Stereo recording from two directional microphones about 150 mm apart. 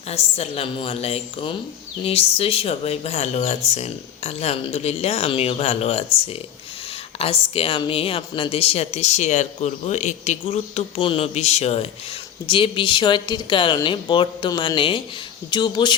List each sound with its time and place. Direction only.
0.1 s a woman's voice: 45° left (ahead or behind)